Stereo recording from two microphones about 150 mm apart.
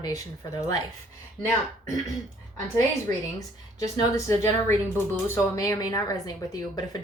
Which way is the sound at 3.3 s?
25° left (ahead or behind).